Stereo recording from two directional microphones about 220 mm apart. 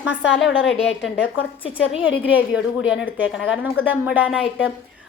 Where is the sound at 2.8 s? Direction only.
5° right (ahead or behind).